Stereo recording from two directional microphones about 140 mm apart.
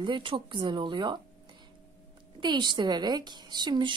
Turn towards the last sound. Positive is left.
turn(degrees=-35)  # may be behind; listen again after turning